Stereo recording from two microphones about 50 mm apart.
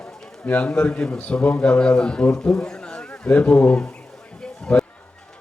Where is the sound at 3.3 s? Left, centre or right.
Left.